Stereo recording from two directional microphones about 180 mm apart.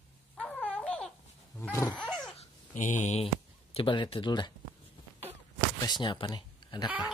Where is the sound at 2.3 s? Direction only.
40° left (ahead or behind).